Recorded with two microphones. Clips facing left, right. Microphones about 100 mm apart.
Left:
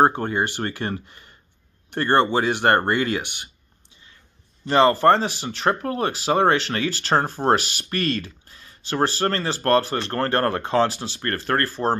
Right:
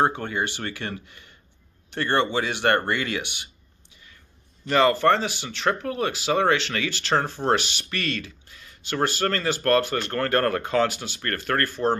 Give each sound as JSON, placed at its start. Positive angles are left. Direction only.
{"t": 0.0, "sound": "speech", "side_deg": 40}
{"t": 4.6, "sound": "speech", "side_deg": 30}